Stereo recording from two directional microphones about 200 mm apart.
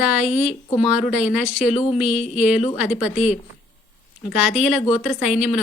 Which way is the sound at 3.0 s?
35° left (ahead or behind).